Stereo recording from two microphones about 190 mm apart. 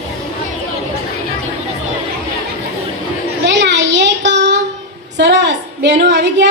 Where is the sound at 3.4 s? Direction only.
65° right (ahead or behind).